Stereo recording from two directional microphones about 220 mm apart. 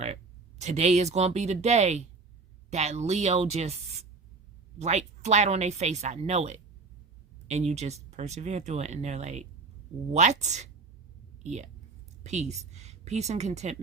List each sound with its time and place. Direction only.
0.6 s speech: 30° right (ahead or behind)
4.8 s a woman's voice: 30° right (ahead or behind)